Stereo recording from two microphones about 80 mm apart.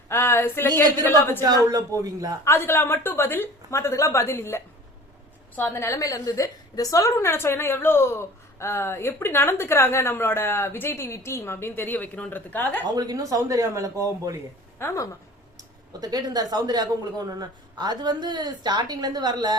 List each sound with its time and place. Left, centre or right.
0.1 s speech: left
1.7 s speech: right
2.4 s a woman's voice: left
13.0 s speech: right
14.8 s a woman's voice: left
15.5 s speech: right